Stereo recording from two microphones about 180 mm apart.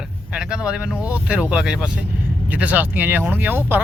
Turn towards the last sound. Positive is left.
turn(degrees=-10)  # may be behind; listen again after turning